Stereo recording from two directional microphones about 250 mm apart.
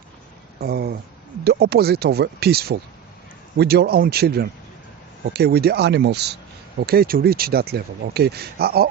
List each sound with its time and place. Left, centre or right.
0.6 s speech: right